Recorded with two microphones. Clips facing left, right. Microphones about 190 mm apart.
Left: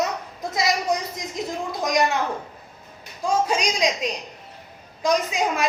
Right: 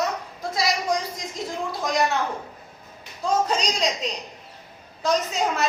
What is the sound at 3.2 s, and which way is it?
A woman's voice, 10° left (ahead or behind).